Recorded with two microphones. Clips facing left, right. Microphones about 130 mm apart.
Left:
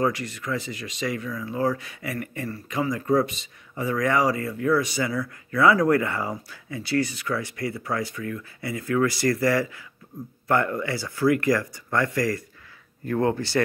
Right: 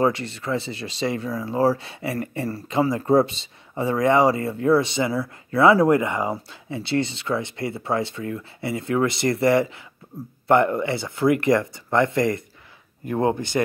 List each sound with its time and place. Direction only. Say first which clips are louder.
0.0 s speech: right 3 dB; 25° right (ahead or behind)
10.1 s speech: right 1 dB; 35° right (ahead or behind)
10.5 s speech: right 5 dB; 25° right (ahead or behind)